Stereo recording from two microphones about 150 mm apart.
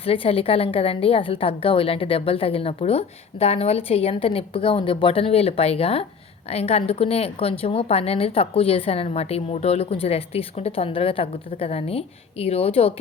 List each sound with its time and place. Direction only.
0.0 s a woman's voice: 40° left (ahead or behind)